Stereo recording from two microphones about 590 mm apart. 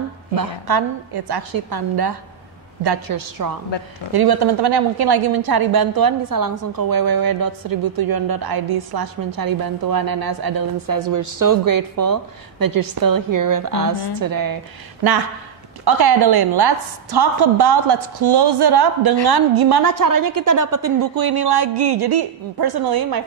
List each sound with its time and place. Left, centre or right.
0.4 s a woman's voice: right
15.8 s a woman's voice: right